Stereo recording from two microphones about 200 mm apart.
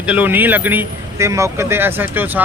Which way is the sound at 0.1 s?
10° right (ahead or behind).